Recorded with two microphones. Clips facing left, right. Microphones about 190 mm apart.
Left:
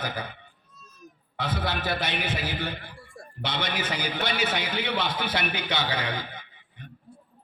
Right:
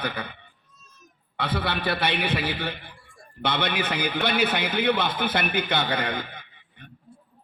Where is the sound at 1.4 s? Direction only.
60° right (ahead or behind).